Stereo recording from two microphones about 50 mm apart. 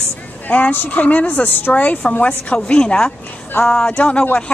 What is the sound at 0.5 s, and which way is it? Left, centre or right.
Speech, left.